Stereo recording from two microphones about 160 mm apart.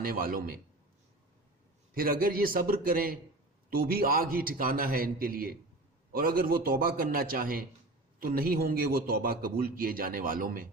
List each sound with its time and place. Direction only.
0.0 s a man's voice: 65° right (ahead or behind)
2.0 s a man's voice: 65° right (ahead or behind)